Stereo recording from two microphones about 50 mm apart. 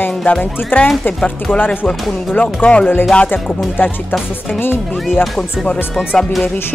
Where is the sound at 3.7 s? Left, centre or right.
Left.